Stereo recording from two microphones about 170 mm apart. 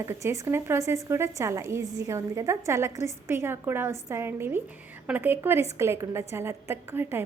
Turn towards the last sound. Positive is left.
turn(degrees=-15)  # may be behind; listen again after turning